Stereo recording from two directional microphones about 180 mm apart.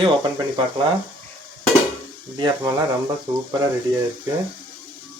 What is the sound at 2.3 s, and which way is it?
Speech, 25° right (ahead or behind).